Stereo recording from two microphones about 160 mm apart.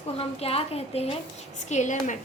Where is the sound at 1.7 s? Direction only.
50° left (ahead or behind).